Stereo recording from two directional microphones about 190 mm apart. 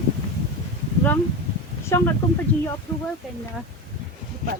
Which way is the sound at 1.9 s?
15° left (ahead or behind).